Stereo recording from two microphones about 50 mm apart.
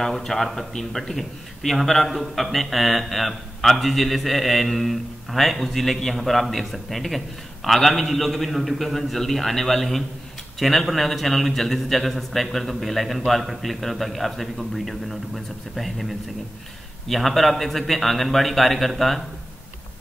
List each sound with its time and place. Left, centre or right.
0.0 s a man's voice: centre